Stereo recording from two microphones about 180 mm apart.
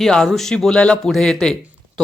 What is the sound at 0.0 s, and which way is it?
A man's voice, 5° left (ahead or behind).